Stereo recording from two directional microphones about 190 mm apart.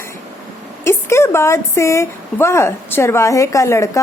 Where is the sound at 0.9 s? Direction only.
15° left (ahead or behind).